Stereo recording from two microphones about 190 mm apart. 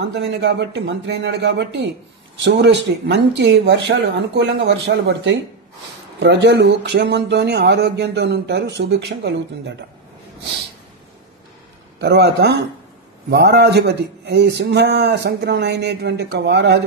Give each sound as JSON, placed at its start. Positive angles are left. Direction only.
{"t": 0.1, "sound": "speech", "side_deg": -65}
{"t": 12.0, "sound": "speech", "side_deg": -60}